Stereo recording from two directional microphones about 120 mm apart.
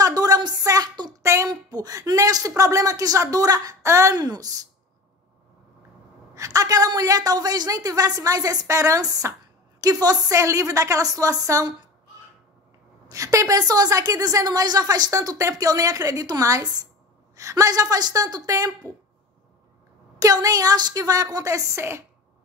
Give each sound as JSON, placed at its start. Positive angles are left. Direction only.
{"t": 0.0, "sound": "a sound", "side_deg": -30}
{"t": 1.5, "sound": "a woman's voice", "side_deg": -30}
{"t": 6.3, "sound": "a woman's voice", "side_deg": -30}
{"t": 13.1, "sound": "a woman's voice", "side_deg": -25}
{"t": 20.2, "sound": "a woman's voice", "side_deg": -30}